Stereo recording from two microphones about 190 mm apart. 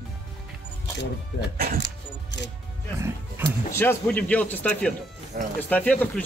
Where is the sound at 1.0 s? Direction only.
65° left (ahead or behind).